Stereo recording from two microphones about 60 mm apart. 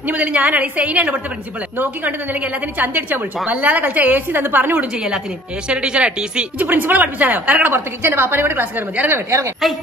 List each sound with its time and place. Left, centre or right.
0.0 s a woman's voice: right
5.7 s speech: centre
6.6 s a woman's voice: right